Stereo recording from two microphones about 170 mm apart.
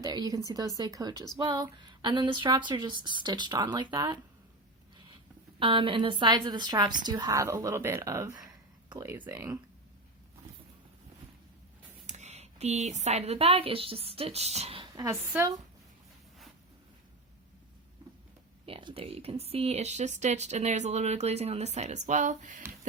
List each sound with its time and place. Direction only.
0.0 s a woman's voice: 25° right (ahead or behind)
5.5 s a woman's voice: 30° right (ahead or behind)
12.0 s speech: 40° right (ahead or behind)
14.9 s a woman's voice: 15° right (ahead or behind)
18.0 s hum: 25° right (ahead or behind)
18.6 s speech: 30° right (ahead or behind); by 22.6 s 50° right (ahead or behind)